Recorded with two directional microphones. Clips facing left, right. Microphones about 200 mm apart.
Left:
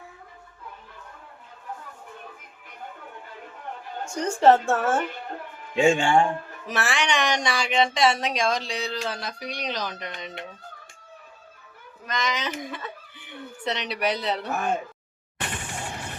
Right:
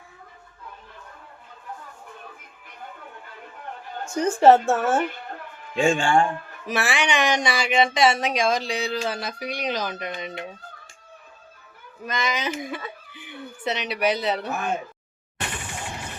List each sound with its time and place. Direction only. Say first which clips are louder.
4.0 s speech: right 3 dB; 5° right (ahead or behind)
5.7 s a man's voice: left 1 dB; 20° left (ahead or behind)
6.7 s speech: right 2 dB; 10° right (ahead or behind)
12.0 s speech: right 2 dB; 10° right (ahead or behind)